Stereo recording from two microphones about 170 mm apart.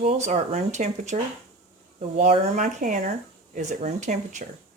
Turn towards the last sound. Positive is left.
turn(degrees=-45)  # may be behind; listen again after turning